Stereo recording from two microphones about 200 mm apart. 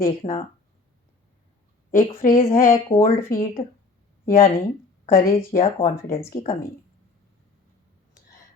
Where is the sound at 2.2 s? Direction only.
45° left (ahead or behind).